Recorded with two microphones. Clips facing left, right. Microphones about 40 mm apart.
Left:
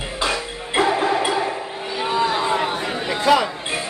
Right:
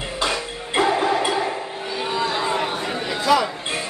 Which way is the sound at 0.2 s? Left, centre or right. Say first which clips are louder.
Left 1 dB; centre.